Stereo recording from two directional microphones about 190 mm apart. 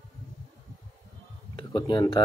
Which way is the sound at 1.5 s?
25° left (ahead or behind).